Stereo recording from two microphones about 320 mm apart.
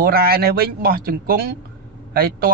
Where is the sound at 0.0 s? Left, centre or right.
Right.